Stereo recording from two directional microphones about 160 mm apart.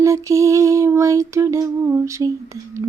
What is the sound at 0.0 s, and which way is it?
Lullaby, 20° right (ahead or behind).